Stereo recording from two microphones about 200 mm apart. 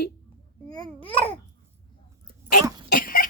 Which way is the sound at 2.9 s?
45° left (ahead or behind).